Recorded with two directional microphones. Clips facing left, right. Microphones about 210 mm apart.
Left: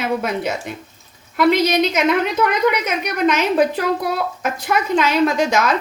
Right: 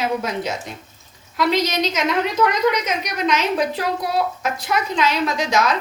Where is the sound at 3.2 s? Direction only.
55° left (ahead or behind).